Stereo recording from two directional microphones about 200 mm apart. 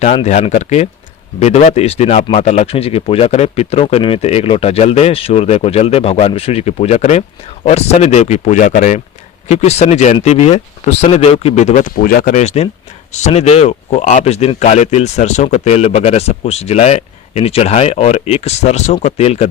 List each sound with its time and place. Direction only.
0.0 s speech: 35° left (ahead or behind)